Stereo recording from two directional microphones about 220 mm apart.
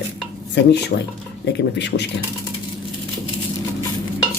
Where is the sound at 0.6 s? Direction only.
50° left (ahead or behind).